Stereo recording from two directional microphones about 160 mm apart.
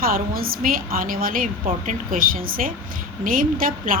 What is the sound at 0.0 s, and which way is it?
A woman's voice, 65° right (ahead or behind).